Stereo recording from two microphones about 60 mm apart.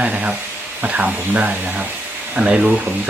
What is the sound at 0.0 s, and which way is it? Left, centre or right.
Speech, right.